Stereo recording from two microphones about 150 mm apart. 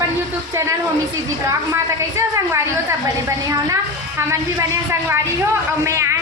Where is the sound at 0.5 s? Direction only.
20° right (ahead or behind).